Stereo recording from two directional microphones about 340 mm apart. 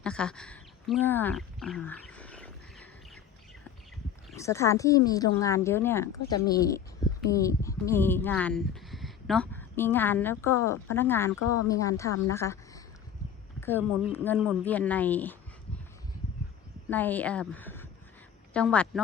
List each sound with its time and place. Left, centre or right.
0.0 s speech: centre
4.3 s speech: centre
11.3 s speech: left
11.7 s speech: centre
16.9 s a woman's voice: centre